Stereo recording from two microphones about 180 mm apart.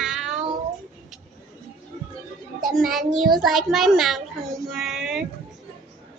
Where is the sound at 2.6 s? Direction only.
Centre (ahead or behind).